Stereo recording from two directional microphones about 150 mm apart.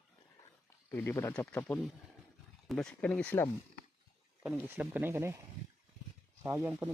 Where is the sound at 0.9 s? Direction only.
15° left (ahead or behind).